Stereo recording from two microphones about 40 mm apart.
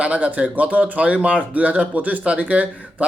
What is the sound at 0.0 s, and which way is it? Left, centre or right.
Speech, right.